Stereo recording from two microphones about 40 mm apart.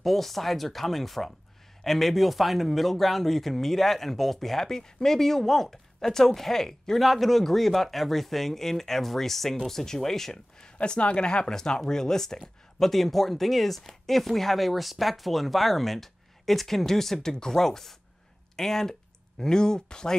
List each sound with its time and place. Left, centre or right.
0.0 s speech: centre
10.8 s speech: left